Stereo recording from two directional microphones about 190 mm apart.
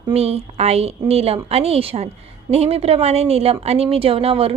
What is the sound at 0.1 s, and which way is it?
A woman's voice, 35° right (ahead or behind).